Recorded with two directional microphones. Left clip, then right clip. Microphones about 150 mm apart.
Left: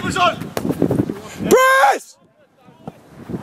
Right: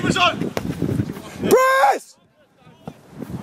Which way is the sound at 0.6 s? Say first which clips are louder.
Left 4 dB; 15° left (ahead or behind).